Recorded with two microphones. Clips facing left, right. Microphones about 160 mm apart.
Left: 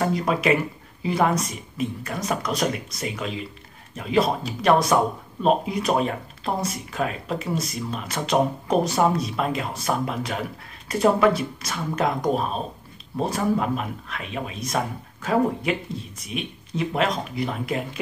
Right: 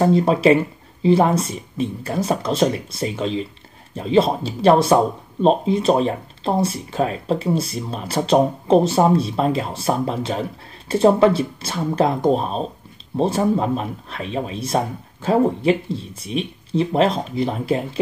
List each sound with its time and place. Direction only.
0.0 s speech: 30° right (ahead or behind)